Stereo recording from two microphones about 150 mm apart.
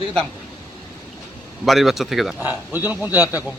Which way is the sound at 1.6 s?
Centre (ahead or behind).